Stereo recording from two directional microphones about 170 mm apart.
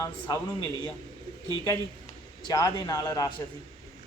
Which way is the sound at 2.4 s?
25° left (ahead or behind).